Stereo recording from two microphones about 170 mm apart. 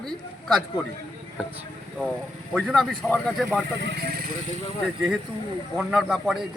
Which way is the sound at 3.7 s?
80° right.